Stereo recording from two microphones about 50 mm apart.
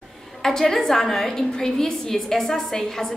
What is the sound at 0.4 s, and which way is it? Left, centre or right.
A woman's voice, centre.